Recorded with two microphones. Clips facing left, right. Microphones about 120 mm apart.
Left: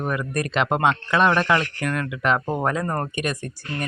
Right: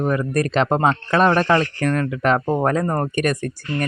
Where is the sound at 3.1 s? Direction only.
45° right (ahead or behind).